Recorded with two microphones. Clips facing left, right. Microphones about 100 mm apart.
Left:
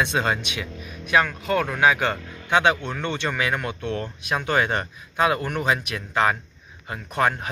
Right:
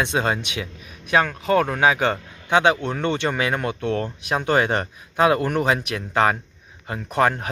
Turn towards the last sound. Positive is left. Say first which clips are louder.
# right 3 dB
turn(degrees=-35)  # may be behind; listen again after turning